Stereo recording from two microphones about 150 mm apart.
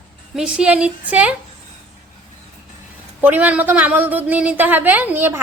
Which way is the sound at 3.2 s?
10° right (ahead or behind).